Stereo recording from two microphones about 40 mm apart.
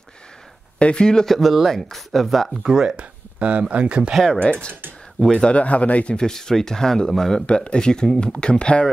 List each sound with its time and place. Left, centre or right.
0.7 s speech: left
1.2 s speech: centre
2.6 s speech: centre
3.0 s a sound: right
3.7 s speech: right
4.3 s speech: left
6.1 s speech: centre
7.4 s speech: left